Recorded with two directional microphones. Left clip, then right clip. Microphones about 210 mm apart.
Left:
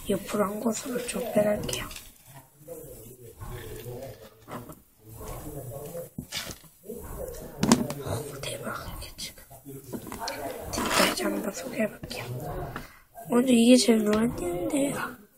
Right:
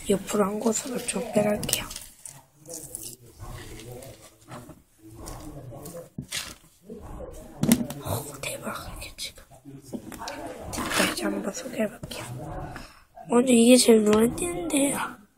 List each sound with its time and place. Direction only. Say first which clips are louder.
0.1 s speech: right 3 dB; 20° right (ahead or behind)
8.0 s whispering: right 1 dB; 20° right (ahead or behind)
10.2 s a sound: left 3 dB; 10° right (ahead or behind)
12.8 s speech: even; 15° right (ahead or behind)